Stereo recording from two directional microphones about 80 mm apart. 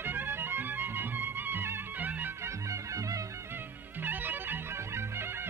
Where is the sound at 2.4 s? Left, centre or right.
Right.